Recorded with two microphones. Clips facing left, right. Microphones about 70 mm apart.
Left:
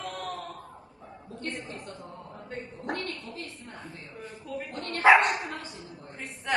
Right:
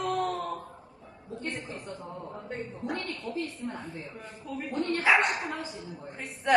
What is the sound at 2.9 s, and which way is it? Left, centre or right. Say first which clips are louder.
A woman's voice: even; centre.